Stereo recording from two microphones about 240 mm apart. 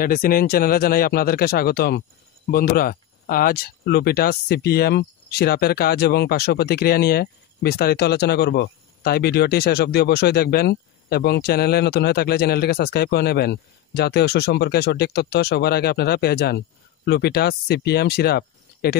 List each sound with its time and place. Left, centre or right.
0.0 s speech: left